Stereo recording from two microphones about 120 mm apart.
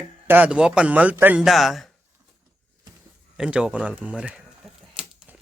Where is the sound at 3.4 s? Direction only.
5° right (ahead or behind).